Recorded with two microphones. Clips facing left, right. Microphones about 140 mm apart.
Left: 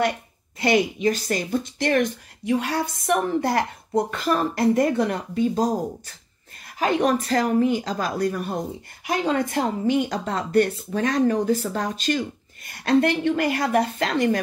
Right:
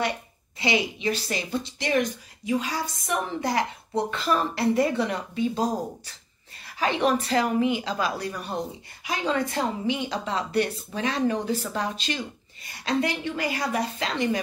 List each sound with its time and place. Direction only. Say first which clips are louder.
0.6 s speech: left 6 dB; 50° left (ahead or behind)
6.8 s speech: left 3 dB; 45° left (ahead or behind)